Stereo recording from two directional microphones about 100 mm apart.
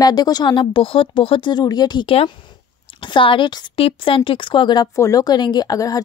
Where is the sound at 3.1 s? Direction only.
55° left (ahead or behind).